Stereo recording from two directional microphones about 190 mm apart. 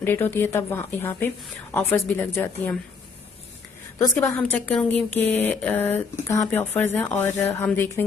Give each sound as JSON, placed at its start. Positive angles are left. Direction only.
{"t": 0.0, "sound": "speech", "side_deg": 10}
{"t": 3.9, "sound": "a woman's voice", "side_deg": 20}
{"t": 4.4, "sound": "speech", "side_deg": 5}